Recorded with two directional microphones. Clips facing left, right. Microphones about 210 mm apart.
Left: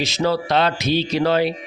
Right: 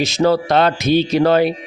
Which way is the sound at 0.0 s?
50° right (ahead or behind).